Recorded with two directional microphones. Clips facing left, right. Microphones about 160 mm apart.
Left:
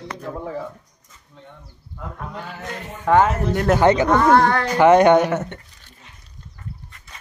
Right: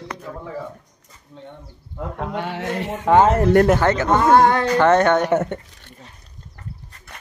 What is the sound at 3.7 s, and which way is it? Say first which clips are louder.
Speech: left 3 dB; 15° left (ahead or behind).